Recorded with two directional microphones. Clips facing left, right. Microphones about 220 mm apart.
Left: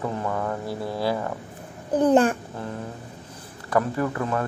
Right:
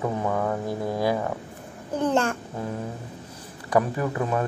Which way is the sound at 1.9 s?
15° left (ahead or behind).